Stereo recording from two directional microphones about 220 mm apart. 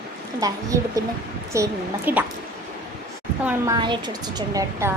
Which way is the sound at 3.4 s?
15° right (ahead or behind).